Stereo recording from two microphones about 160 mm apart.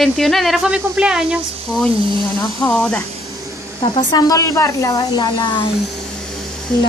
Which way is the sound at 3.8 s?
30° left (ahead or behind).